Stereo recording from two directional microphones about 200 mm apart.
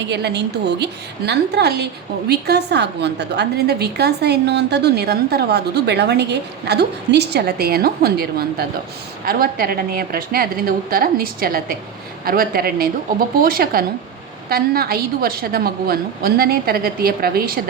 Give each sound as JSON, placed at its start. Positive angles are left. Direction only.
{"t": 0.0, "sound": "a woman's voice", "side_deg": -55}